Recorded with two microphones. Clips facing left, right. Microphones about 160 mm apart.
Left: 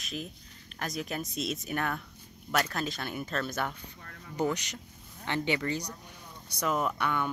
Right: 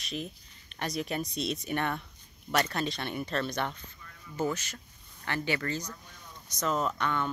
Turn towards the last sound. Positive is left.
turn(degrees=10)  # may be behind; listen again after turning